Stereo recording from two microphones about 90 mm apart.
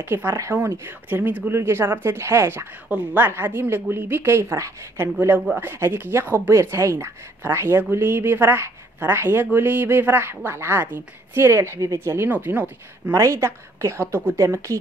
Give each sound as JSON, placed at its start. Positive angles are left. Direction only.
{"t": 0.1, "sound": "a woman's voice", "side_deg": -25}
{"t": 13.2, "sound": "a woman's voice", "side_deg": -30}